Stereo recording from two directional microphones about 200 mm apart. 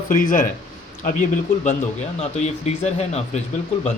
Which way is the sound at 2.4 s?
35° left (ahead or behind).